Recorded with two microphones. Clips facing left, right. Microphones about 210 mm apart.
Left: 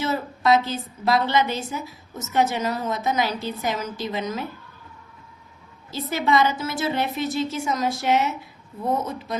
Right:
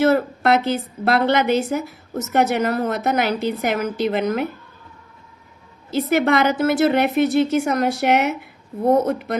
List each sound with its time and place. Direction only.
0.0 s a woman's voice: 60° right (ahead or behind)
6.0 s a woman's voice: 65° right (ahead or behind)